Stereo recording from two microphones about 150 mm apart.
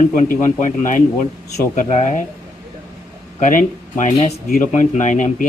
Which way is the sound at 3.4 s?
65° left (ahead or behind).